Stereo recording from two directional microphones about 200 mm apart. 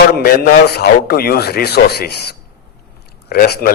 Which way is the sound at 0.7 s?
50° left (ahead or behind).